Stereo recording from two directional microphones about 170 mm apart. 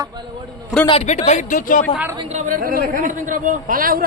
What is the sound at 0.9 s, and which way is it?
Speech, 40° left (ahead or behind).